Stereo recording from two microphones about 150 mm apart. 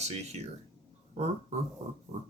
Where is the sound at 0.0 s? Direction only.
45° right (ahead or behind).